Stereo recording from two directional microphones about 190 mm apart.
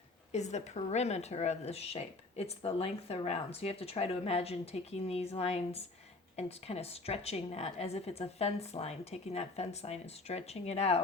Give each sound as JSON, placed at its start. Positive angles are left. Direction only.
{"t": 0.3, "sound": "speech", "side_deg": 35}